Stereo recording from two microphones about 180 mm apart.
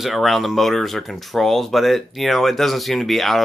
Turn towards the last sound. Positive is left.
turn(degrees=0)  # may be behind; listen again after turning